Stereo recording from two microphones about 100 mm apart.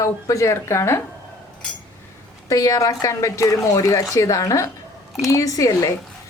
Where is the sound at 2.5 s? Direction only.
35° left (ahead or behind).